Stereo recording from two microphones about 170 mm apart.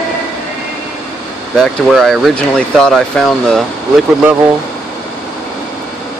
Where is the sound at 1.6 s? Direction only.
Centre (ahead or behind).